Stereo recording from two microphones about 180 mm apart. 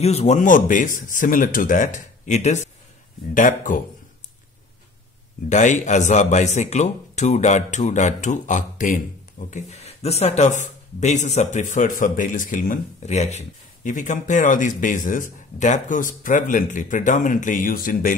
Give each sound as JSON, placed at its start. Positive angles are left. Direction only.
{"t": 0.0, "sound": "speech", "side_deg": 35}
{"t": 5.5, "sound": "speech", "side_deg": 40}